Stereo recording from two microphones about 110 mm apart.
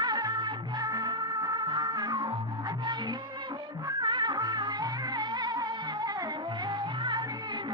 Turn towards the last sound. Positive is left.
turn(degrees=-45)  # may be behind; listen again after turning